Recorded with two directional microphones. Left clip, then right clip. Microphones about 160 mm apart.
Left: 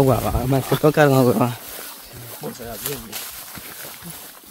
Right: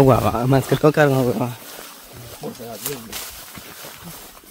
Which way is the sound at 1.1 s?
30° left (ahead or behind).